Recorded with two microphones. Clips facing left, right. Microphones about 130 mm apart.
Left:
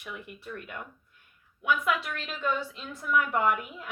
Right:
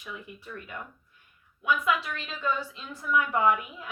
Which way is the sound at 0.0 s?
70° left (ahead or behind).